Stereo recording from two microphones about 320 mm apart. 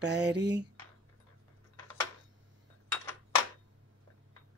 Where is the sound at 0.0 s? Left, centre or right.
Right.